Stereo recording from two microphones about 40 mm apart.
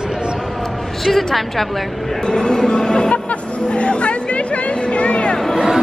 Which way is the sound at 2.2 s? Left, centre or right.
Centre.